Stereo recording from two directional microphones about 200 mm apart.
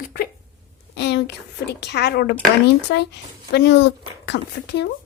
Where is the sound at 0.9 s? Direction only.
60° left (ahead or behind).